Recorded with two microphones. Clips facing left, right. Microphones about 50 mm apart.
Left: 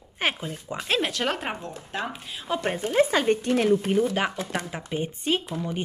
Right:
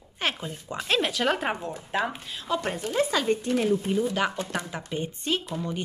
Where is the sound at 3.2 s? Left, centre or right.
Left.